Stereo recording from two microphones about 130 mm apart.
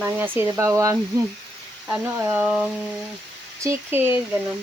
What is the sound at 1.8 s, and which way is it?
Speech, 5° right (ahead or behind).